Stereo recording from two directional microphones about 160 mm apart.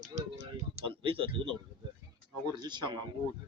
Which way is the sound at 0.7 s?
35° right (ahead or behind).